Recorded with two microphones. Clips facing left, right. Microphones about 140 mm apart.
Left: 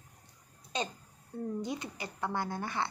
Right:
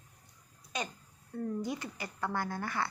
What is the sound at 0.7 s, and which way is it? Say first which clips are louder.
Speech: left 2 dB; 25° left (ahead or behind).